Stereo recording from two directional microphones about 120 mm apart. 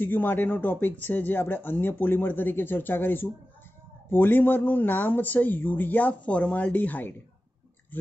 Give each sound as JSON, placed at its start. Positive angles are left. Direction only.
{"t": 0.0, "sound": "speech", "side_deg": 15}